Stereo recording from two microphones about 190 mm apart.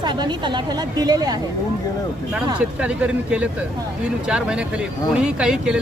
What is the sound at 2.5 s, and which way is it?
Speech, 5° right (ahead or behind).